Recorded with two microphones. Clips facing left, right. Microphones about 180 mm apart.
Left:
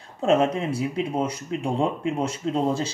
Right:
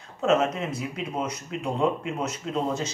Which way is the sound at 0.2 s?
30° left (ahead or behind).